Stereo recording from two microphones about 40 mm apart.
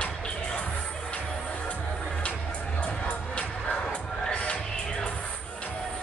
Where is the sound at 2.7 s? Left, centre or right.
Left.